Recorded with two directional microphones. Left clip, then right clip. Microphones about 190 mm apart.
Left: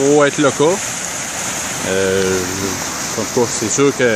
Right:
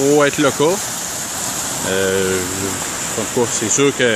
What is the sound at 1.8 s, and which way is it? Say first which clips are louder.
Speech: left 1 dB; 5° left (ahead or behind).